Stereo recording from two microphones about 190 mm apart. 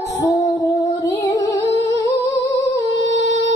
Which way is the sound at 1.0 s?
20° left (ahead or behind).